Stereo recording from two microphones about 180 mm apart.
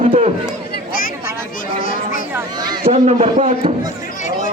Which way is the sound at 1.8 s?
50° left (ahead or behind).